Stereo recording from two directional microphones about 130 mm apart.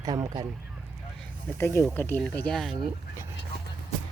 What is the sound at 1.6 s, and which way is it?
Speech, 20° left (ahead or behind).